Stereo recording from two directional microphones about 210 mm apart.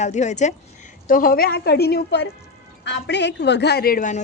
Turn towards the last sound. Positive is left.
turn(degrees=40)  # may be behind; listen again after turning